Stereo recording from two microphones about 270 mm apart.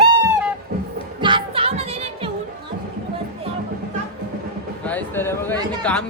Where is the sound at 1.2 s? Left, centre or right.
Centre.